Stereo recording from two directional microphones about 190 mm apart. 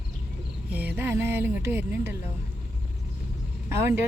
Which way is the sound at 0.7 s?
10° right (ahead or behind).